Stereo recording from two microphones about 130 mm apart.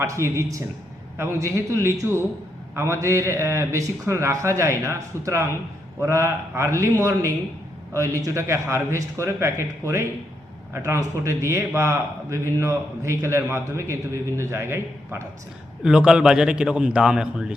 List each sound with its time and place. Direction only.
0.0 s speech: 20° right (ahead or behind)
15.8 s a man's voice: 5° right (ahead or behind)